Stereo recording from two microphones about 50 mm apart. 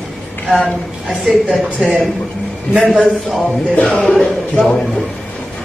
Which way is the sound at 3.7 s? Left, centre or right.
Left.